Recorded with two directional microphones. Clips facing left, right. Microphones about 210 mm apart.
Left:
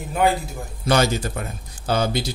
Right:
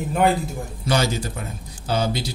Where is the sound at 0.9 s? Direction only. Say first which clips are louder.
Left 3 dB; 55° left (ahead or behind).